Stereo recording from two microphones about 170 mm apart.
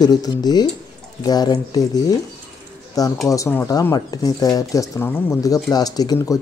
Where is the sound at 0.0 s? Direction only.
25° left (ahead or behind).